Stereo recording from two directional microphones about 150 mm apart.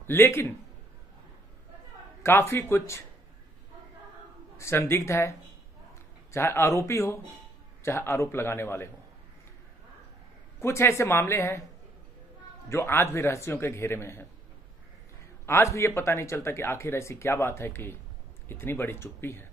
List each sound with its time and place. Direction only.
0.0 s a man's voice: 15° left (ahead or behind)
2.2 s speech: 15° left (ahead or behind)
4.6 s speech: 15° left (ahead or behind)
6.3 s speech: 15° left (ahead or behind)
10.6 s speech: 15° left (ahead or behind)
12.6 s speech: 15° left (ahead or behind)
15.4 s speech: 20° left (ahead or behind)